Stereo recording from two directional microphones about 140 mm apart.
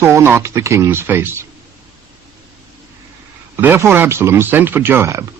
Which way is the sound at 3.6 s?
15° right (ahead or behind).